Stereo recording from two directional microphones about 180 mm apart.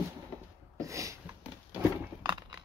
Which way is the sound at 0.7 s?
15° right (ahead or behind).